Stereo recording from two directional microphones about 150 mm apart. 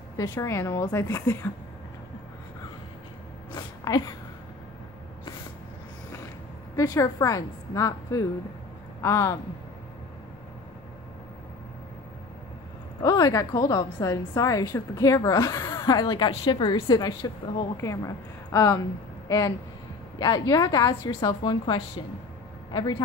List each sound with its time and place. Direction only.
0.2 s a woman's voice: 20° left (ahead or behind)
3.5 s sneeze: 25° left (ahead or behind)
6.8 s a woman's voice: 20° left (ahead or behind)
13.0 s a woman's voice: 25° left (ahead or behind)